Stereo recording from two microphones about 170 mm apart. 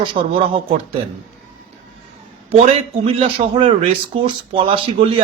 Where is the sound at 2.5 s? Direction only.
35° right (ahead or behind).